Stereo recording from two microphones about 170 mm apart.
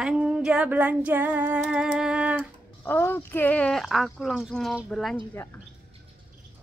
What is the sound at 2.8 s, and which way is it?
A woman's voice, 10° left (ahead or behind).